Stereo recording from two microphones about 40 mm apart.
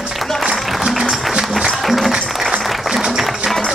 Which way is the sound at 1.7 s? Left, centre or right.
Centre.